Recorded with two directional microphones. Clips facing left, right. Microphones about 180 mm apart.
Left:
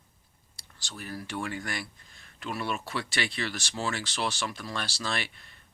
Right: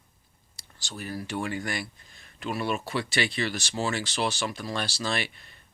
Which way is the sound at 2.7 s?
20° right (ahead or behind).